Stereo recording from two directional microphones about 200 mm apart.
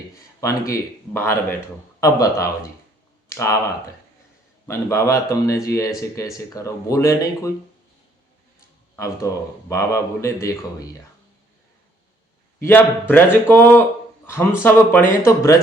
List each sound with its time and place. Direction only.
0.3 s speech: 15° left (ahead or behind)
4.6 s speech: 15° left (ahead or behind)
9.0 s speech: 15° left (ahead or behind)
12.5 s speech: 10° left (ahead or behind)